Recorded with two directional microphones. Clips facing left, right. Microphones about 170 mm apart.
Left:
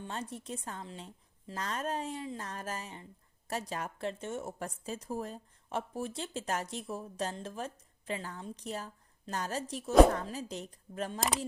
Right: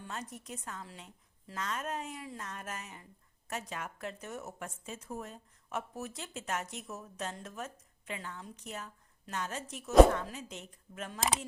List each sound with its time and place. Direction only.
0.0 s speech: 30° left (ahead or behind)